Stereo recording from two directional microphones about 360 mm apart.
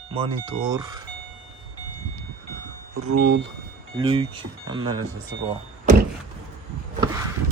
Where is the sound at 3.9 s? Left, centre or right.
Centre.